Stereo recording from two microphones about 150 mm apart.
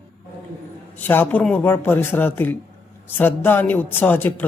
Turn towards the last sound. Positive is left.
turn(degrees=10)  # may be behind; listen again after turning